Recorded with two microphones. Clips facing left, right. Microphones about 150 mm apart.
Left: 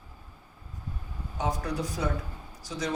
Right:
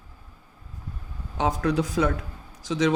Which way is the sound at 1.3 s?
90° right.